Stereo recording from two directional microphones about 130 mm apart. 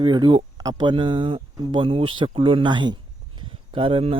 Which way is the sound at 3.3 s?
40° right (ahead or behind).